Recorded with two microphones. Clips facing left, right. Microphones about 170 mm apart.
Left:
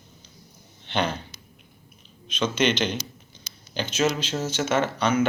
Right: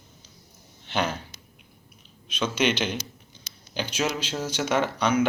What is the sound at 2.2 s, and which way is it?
Speech, 10° right (ahead or behind).